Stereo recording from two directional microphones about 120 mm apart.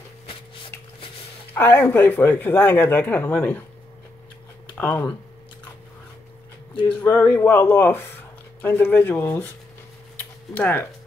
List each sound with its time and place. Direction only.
1.5 s speech: 20° left (ahead or behind)
4.7 s speech: 15° left (ahead or behind)
7.0 s speech: 15° left (ahead or behind)
10.1 s a sound: 15° left (ahead or behind)